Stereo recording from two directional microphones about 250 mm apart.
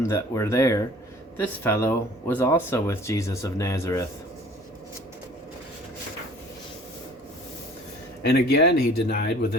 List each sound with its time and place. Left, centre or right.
0.0 s speech: centre
8.2 s speech: left